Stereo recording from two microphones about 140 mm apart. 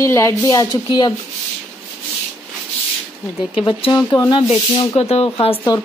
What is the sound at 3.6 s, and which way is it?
Speech, 30° left (ahead or behind).